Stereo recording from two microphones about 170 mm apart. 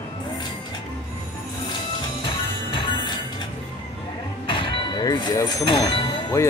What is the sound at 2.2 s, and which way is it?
Music, 30° left (ahead or behind).